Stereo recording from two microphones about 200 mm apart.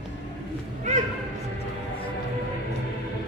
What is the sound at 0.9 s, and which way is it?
Music, 35° right (ahead or behind).